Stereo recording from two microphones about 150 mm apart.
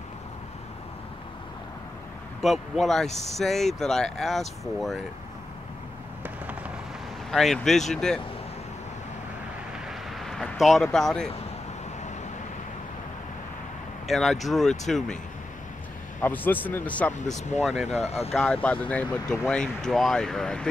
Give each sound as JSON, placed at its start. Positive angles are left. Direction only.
{"t": 2.4, "sound": "speech", "side_deg": 0}
{"t": 7.2, "sound": "speech", "side_deg": 0}
{"t": 9.8, "sound": "vehicle", "side_deg": 0}
{"t": 14.0, "sound": "speech", "side_deg": 0}
{"t": 16.2, "sound": "speech", "side_deg": 10}
{"t": 17.6, "sound": "speech", "side_deg": 0}
{"t": 17.8, "sound": "speech", "side_deg": 45}
{"t": 18.3, "sound": "speech", "side_deg": 5}